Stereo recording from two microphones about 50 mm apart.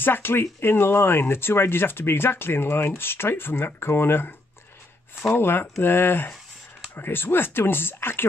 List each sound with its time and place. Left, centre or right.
0.0 s speech: left
5.3 s speech: left